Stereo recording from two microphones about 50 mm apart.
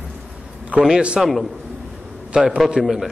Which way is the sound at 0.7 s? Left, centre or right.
Right.